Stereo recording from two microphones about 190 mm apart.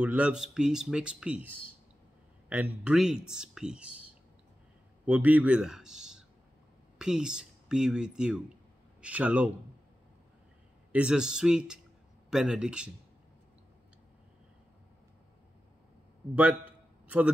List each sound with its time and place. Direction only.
0.0 s speech: 5° right (ahead or behind)
2.5 s a man's voice: 10° right (ahead or behind)
10.9 s speech: 5° right (ahead or behind)